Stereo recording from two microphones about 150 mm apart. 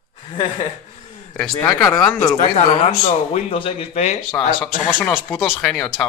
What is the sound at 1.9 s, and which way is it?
Speech, 5° left (ahead or behind).